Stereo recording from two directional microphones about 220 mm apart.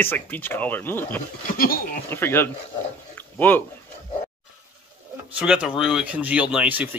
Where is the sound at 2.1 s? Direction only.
10° left (ahead or behind).